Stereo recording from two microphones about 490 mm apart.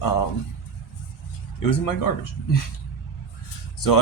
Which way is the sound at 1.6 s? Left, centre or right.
Left.